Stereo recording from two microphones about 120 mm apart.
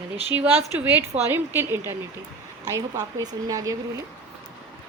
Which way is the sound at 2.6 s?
30° right (ahead or behind).